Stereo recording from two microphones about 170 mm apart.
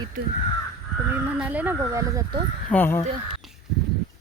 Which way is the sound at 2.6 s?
10° left (ahead or behind).